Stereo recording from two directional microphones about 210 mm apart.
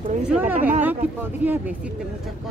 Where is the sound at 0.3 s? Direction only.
10° right (ahead or behind).